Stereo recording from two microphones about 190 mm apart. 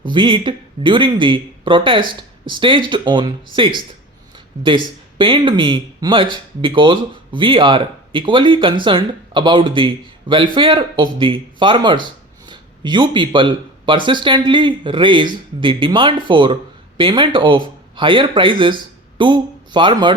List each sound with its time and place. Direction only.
0.1 s speech: 25° right (ahead or behind)